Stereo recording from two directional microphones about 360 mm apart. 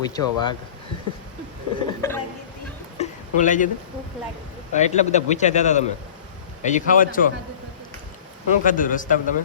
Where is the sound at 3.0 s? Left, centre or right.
Left.